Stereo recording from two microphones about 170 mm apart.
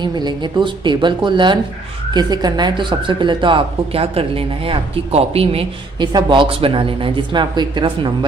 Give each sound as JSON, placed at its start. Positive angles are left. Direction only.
{"t": 0.0, "sound": "speech", "side_deg": -25}